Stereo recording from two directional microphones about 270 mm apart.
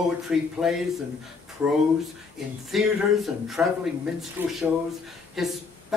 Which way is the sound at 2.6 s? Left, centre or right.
Centre.